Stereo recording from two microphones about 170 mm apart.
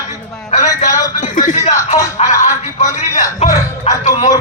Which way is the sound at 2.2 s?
40° left (ahead or behind).